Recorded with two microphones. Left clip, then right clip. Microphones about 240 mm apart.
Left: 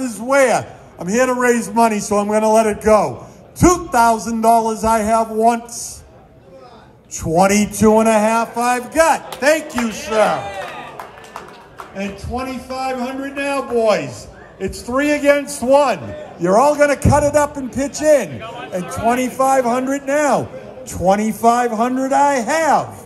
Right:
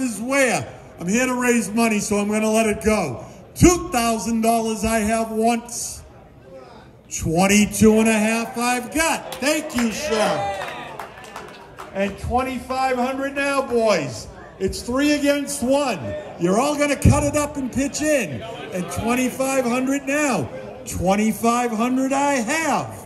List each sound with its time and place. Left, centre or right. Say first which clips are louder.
0.0 s a man's voice: left 5 dB; centre
7.1 s a man's voice: left 5 dB; centre
10.0 s a man's voice: left 6 dB; centre
10.4 s a man's voice: right 1 dB; centre
12.4 s a man's voice: right 2 dB; centre
15.3 s a man's voice: left 6 dB; right
16.4 s a man's voice: left 7 dB; centre